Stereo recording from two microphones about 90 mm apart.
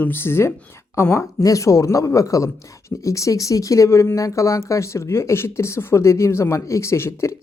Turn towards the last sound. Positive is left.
turn(degrees=30)  # may be behind; listen again after turning